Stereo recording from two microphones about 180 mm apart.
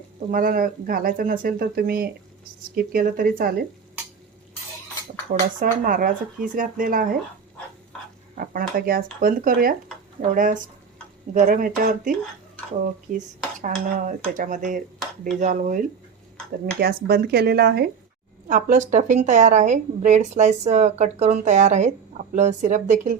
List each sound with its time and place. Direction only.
0.3 s speech: 50° right (ahead or behind)
5.3 s speech: 50° right (ahead or behind)
8.4 s speech: 55° right (ahead or behind)
16.8 s speech: 60° right (ahead or behind)
18.4 s speech: 45° right (ahead or behind)